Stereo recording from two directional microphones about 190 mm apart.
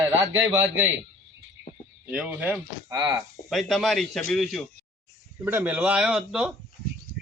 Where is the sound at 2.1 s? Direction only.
10° right (ahead or behind).